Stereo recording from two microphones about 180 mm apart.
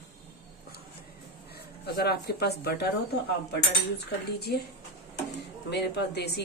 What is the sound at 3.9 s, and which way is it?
Speech, 65° left (ahead or behind).